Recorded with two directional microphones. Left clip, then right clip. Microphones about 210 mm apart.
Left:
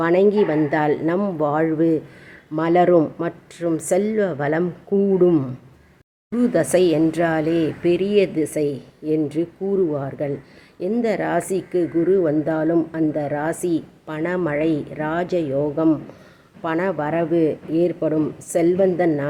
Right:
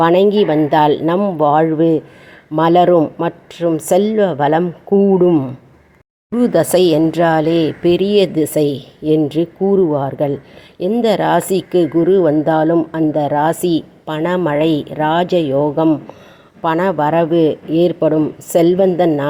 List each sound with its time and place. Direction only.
0.0 s speech: 15° right (ahead or behind)